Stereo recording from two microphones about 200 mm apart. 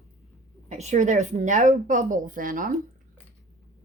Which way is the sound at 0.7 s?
35° right (ahead or behind).